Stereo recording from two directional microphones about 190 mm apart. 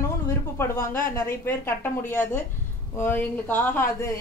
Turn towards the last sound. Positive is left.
turn(degrees=15)  # may be behind; listen again after turning